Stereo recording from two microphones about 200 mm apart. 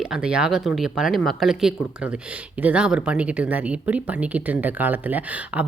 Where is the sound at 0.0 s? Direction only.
5° right (ahead or behind).